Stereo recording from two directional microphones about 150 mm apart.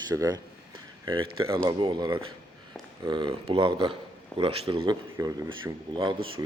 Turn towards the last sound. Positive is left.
turn(degrees=-35)  # may be behind; listen again after turning